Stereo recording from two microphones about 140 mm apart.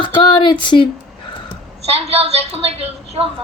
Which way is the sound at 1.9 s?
45° right (ahead or behind).